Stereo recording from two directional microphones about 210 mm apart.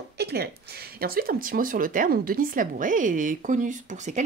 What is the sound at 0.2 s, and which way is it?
Speech, 50° right (ahead or behind).